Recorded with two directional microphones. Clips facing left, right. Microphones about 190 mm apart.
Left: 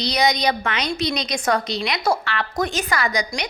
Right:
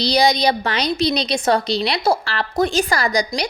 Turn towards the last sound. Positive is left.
turn(degrees=-35)  # may be behind; listen again after turning